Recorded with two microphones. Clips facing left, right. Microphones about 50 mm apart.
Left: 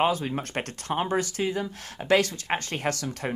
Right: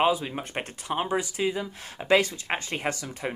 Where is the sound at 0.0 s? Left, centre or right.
Centre.